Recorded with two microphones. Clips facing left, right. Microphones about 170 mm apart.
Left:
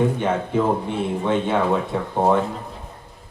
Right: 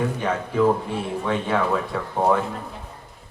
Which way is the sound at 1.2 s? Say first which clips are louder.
Left 2 dB; 20° left (ahead or behind).